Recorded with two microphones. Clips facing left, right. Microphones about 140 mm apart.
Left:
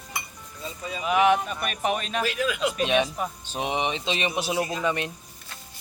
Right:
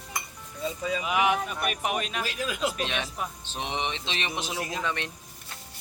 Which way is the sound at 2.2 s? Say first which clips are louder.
Left 6 dB; 35° right (ahead or behind).